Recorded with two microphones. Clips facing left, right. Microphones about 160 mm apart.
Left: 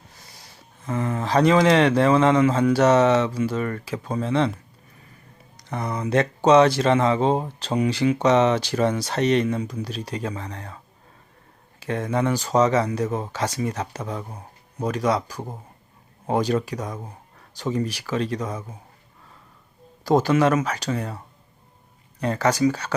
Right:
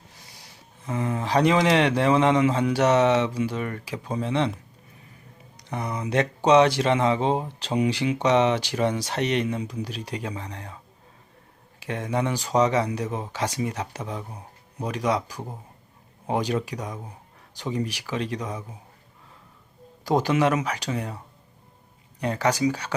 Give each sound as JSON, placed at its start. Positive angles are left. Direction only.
{"t": 0.1, "sound": "speech", "side_deg": -15}
{"t": 5.5, "sound": "speech", "side_deg": -15}
{"t": 11.8, "sound": "speech", "side_deg": -15}
{"t": 20.1, "sound": "speech", "side_deg": -15}
{"t": 22.2, "sound": "speech", "side_deg": -15}